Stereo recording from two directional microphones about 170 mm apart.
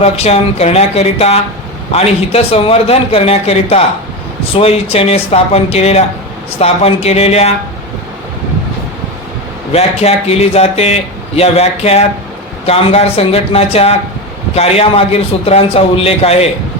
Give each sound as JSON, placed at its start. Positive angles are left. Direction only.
{"t": 0.0, "sound": "speech", "side_deg": 35}
{"t": 9.7, "sound": "speech", "side_deg": 35}